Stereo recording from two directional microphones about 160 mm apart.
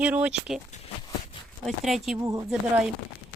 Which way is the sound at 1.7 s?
Centre (ahead or behind).